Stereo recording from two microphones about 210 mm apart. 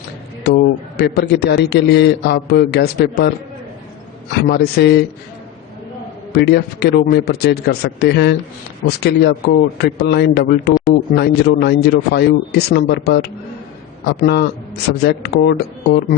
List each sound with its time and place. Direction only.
0.4 s a man's voice: 50° left (ahead or behind)
6.3 s a man's voice: 50° left (ahead or behind)